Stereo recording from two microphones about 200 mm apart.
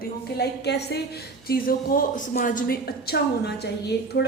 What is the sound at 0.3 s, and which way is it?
A woman's voice, 55° left (ahead or behind).